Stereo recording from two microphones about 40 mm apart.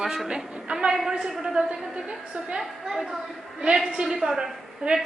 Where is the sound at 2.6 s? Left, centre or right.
Centre.